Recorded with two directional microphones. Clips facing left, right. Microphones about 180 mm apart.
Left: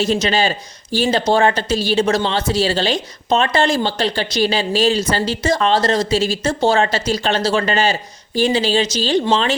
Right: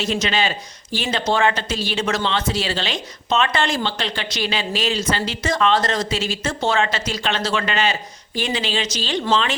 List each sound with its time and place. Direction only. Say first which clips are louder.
0.0 s speech: left 5 dB; 35° left (ahead or behind)